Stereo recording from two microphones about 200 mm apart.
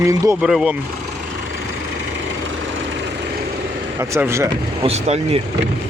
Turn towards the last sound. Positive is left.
turn(degrees=-30)  # may be behind; listen again after turning